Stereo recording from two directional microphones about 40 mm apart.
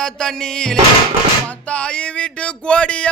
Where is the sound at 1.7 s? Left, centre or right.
Left.